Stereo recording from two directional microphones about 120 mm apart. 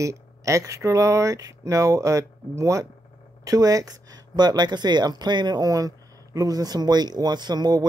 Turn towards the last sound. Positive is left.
turn(degrees=-35)  # may be behind; listen again after turning